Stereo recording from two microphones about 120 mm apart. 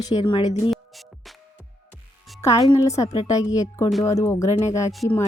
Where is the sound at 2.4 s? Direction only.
25° left (ahead or behind).